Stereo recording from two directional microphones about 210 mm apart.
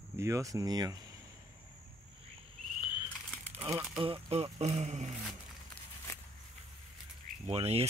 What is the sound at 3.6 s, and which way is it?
Speech, 10° right (ahead or behind).